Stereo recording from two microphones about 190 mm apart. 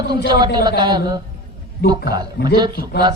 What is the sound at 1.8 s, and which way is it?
Speech, 60° left (ahead or behind).